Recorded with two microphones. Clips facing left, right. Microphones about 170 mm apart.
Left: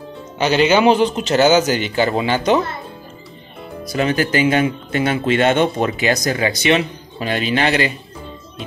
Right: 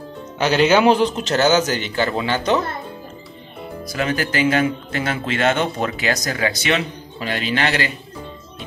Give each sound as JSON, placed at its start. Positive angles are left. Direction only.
{"t": 0.4, "sound": "speech", "side_deg": 0}
{"t": 3.9, "sound": "speech", "side_deg": 20}